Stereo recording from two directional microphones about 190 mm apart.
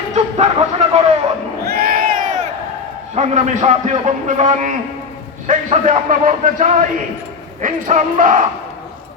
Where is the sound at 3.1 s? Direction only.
35° right (ahead or behind).